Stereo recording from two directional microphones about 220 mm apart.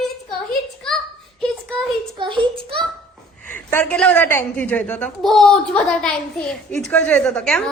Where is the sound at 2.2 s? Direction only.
20° right (ahead or behind).